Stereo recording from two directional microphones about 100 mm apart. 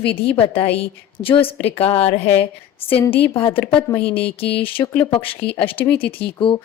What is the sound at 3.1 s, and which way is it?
A woman's voice, 65° left (ahead or behind).